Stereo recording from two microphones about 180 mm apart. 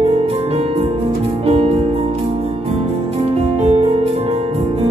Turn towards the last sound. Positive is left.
turn(degrees=-35)  # may be behind; listen again after turning